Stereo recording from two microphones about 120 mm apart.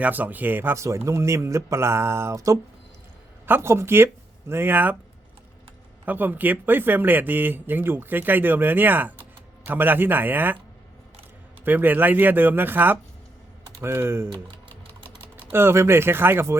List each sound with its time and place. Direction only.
0.0 s speech: 15° right (ahead or behind)
6.1 s speech: 15° right (ahead or behind)
11.6 s speech: 15° right (ahead or behind)
15.5 s speech: 20° right (ahead or behind)